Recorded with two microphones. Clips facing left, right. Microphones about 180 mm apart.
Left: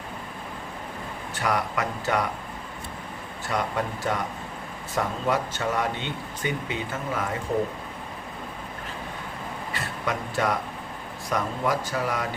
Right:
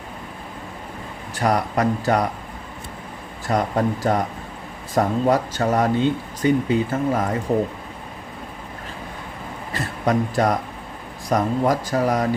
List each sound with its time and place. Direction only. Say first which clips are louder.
1.4 s speech: right 6 dB; 40° right (ahead or behind)
3.5 s speech: right 7 dB; 40° right (ahead or behind)
9.7 s a man's voice: right 10 dB; 40° right (ahead or behind)